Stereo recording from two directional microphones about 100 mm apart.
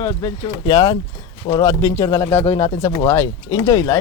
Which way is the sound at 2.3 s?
20° left (ahead or behind).